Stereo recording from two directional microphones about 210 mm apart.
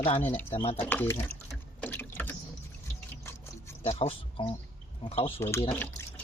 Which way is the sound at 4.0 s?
30° left (ahead or behind).